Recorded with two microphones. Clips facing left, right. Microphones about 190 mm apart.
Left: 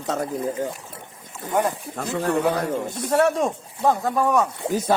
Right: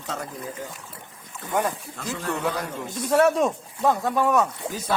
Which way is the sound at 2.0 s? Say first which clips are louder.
Left 6 dB; 50° left (ahead or behind).